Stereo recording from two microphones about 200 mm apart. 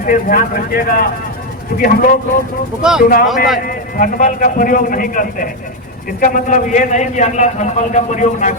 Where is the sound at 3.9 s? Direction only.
40° left (ahead or behind).